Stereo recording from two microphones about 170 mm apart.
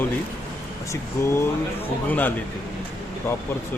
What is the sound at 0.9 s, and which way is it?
Speech, 15° left (ahead or behind).